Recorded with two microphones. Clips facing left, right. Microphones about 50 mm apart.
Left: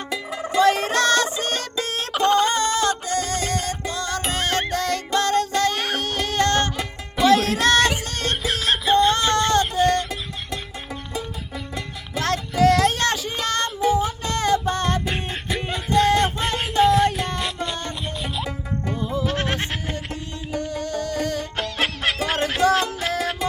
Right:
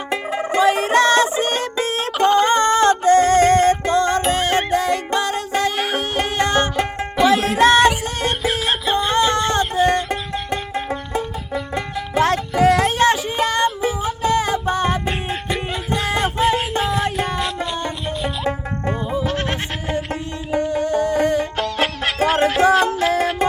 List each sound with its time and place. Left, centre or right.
0.1 s music: right
0.6 s music: centre
2.2 s music: centre
2.5 s music: right
4.3 s music: centre
6.1 s music: centre
12.2 s child singing: centre
13.7 s music: centre
15.3 s a sound: centre
19.2 s goat: centre
20.5 s music: centre
21.6 s music: centre
23.4 s music: right